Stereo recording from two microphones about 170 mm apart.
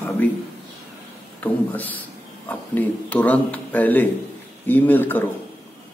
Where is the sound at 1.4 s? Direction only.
10° left (ahead or behind).